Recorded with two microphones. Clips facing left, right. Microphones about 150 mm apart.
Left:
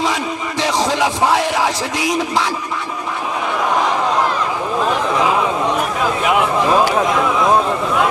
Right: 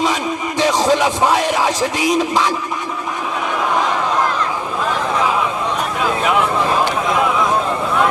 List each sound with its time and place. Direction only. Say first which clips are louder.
0.6 s music: right 3 dB; 15° right (ahead or behind)